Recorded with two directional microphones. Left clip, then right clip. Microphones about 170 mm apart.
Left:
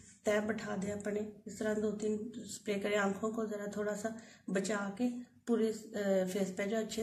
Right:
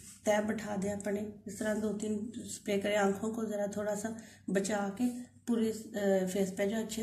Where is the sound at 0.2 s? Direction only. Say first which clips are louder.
Right 2 dB; 25° left (ahead or behind).